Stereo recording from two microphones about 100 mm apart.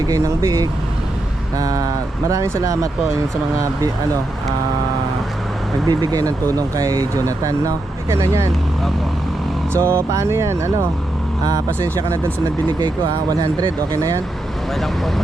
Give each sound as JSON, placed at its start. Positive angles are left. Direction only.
{"t": 0.1, "sound": "speech", "side_deg": -35}
{"t": 5.9, "sound": "speech", "side_deg": -40}
{"t": 9.7, "sound": "speech", "side_deg": -30}
{"t": 13.3, "sound": "speech", "side_deg": -35}